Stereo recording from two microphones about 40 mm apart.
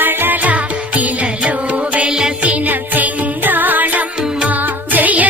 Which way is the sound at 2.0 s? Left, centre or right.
Centre.